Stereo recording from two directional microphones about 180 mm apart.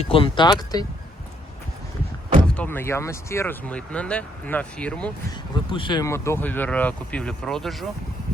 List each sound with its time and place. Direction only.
0.0 s speech: 30° left (ahead or behind)
2.5 s speech: 10° left (ahead or behind)
5.7 s speech: 25° left (ahead or behind); by 7.9 s centre (ahead or behind)